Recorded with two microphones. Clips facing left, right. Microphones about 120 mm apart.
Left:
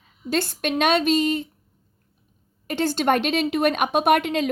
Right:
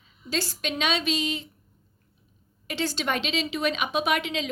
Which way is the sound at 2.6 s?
50° left (ahead or behind).